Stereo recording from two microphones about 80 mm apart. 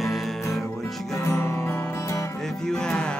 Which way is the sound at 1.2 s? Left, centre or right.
Left.